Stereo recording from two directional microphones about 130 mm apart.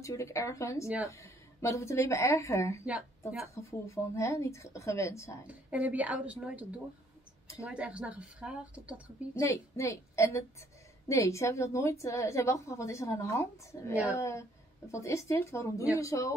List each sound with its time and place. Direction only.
0.0 s a woman's voice: 25° left (ahead or behind)
2.8 s speech: 10° right (ahead or behind)
3.5 s a woman's voice: 25° left (ahead or behind)
5.5 s speech: 10° right (ahead or behind)
9.3 s a woman's voice: 20° left (ahead or behind)